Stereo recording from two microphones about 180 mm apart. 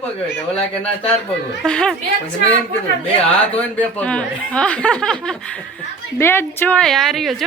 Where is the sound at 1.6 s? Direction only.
5° left (ahead or behind).